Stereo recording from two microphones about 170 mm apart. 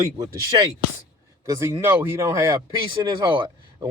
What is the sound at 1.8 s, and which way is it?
Speech, 15° right (ahead or behind).